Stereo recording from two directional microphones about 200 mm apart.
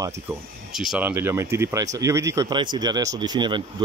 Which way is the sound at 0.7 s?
Centre (ahead or behind).